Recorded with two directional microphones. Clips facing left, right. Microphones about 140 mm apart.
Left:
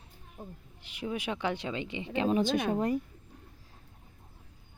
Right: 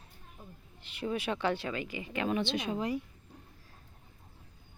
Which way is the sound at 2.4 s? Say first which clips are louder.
Left 5 dB; 50° left (ahead or behind).